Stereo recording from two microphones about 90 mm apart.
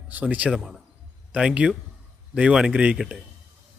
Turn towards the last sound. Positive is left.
turn(degrees=-10)  # may be behind; listen again after turning